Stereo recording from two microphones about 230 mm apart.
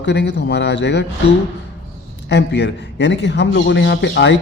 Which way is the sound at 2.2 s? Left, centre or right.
Left.